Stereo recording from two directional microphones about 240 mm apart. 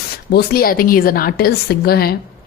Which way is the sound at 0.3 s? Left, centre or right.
Left.